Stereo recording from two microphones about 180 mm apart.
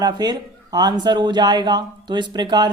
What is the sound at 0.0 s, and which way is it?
Speech, 20° right (ahead or behind).